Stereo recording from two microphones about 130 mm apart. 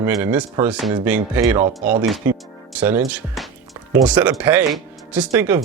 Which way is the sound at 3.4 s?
Centre (ahead or behind).